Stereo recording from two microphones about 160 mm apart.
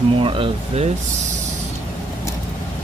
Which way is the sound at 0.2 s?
35° right (ahead or behind).